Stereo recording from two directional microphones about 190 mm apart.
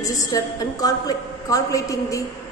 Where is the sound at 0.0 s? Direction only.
20° left (ahead or behind).